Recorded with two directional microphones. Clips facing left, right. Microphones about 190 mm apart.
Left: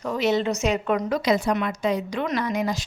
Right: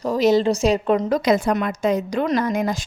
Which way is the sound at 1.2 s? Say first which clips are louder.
Right 3 dB; 50° right (ahead or behind).